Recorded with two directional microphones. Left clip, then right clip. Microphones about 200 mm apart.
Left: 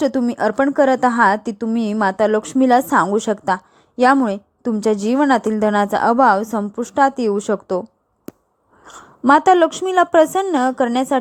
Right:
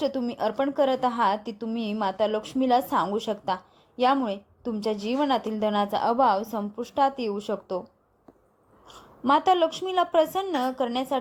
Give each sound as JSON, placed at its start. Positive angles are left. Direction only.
{"t": 0.0, "sound": "a woman's voice", "side_deg": 40}
{"t": 8.9, "sound": "a woman's voice", "side_deg": 40}